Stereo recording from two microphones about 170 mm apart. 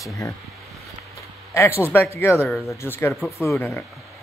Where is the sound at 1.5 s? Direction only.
15° left (ahead or behind).